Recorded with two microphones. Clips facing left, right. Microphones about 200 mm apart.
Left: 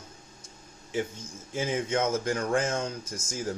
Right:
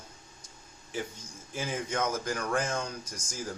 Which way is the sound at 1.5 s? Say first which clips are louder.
Left 4 dB; 20° left (ahead or behind).